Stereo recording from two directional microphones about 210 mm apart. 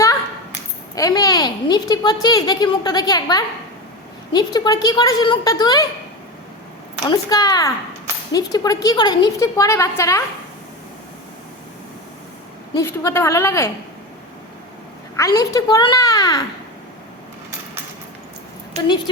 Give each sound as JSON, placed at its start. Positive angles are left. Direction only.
{"t": 0.9, "sound": "a woman's voice", "side_deg": 15}
{"t": 7.0, "sound": "a woman's voice", "side_deg": 20}
{"t": 12.7, "sound": "a woman's voice", "side_deg": 15}
{"t": 15.1, "sound": "a woman's voice", "side_deg": 15}